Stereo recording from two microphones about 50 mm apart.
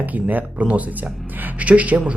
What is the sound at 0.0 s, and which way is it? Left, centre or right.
Speech, right.